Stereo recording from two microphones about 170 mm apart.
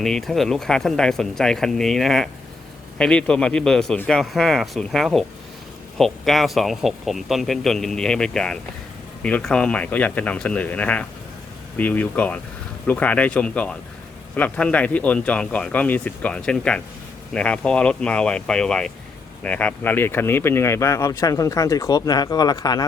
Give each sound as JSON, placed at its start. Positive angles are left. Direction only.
{"t": 0.0, "sound": "speech", "side_deg": 0}